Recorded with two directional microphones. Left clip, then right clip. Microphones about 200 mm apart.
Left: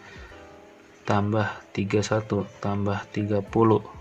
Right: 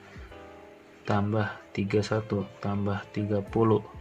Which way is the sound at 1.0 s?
20° left (ahead or behind).